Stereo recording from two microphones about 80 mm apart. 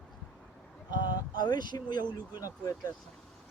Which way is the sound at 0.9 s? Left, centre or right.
Left.